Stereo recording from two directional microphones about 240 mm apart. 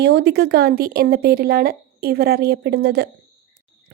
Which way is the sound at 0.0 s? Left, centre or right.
Right.